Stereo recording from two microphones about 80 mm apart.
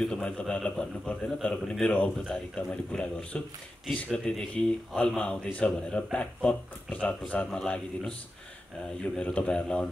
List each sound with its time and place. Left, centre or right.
0.0 s a man's voice: centre